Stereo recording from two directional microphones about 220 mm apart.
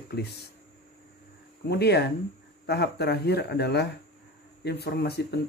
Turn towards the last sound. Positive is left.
turn(degrees=45)  # may be behind; listen again after turning